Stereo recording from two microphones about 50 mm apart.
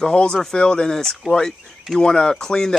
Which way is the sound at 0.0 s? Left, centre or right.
Centre.